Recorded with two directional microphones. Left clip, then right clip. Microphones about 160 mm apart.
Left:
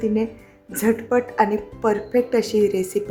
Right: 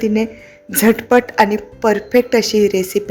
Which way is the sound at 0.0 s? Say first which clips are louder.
Right 5 dB; 20° right (ahead or behind).